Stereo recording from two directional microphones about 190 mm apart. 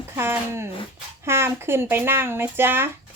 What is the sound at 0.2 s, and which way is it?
Speech, 10° right (ahead or behind).